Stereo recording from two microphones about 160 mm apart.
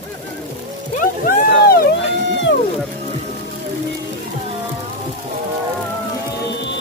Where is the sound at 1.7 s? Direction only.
80° left.